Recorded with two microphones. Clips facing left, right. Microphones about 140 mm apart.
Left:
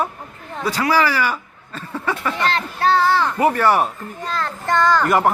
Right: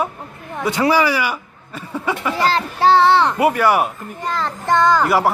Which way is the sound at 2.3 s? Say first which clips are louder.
Right 3 dB; 35° right (ahead or behind).